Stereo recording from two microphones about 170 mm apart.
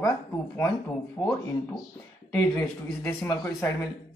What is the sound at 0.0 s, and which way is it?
Speech, 15° left (ahead or behind).